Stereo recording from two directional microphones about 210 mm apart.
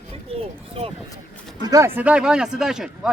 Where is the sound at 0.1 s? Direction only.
30° right (ahead or behind).